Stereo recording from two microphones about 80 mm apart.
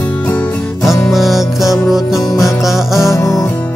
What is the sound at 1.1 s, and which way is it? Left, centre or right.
Music, centre.